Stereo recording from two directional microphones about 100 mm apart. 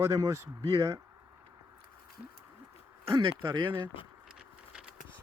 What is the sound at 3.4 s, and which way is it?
Speech, 50° right (ahead or behind).